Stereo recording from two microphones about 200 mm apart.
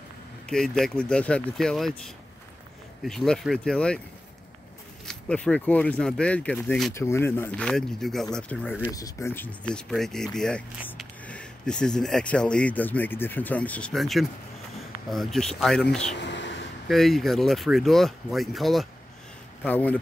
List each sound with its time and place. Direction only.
0.5 s speech: centre (ahead or behind)
5.0 s speech: 5° left (ahead or behind)
16.2 s a sound: 60° left (ahead or behind)
16.8 s speech: centre (ahead or behind)